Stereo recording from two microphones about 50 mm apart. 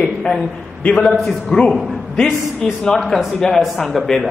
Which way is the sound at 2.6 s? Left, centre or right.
Centre.